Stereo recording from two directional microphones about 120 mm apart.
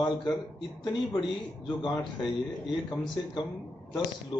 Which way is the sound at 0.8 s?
40° left (ahead or behind).